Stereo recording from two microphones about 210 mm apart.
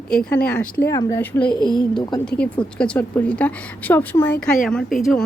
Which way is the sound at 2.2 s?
5° left (ahead or behind).